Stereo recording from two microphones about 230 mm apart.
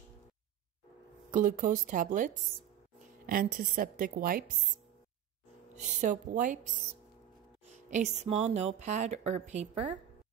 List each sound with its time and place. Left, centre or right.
1.3 s a woman's voice: right
5.8 s a woman's voice: right